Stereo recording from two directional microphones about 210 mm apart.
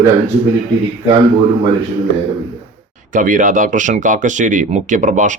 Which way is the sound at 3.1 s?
40° right (ahead or behind).